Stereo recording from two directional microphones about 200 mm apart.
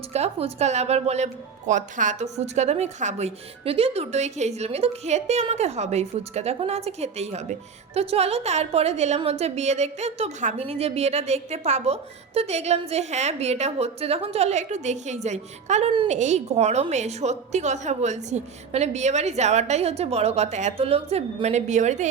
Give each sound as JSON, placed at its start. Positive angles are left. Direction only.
{"t": 0.1, "sound": "a woman's voice", "side_deg": -30}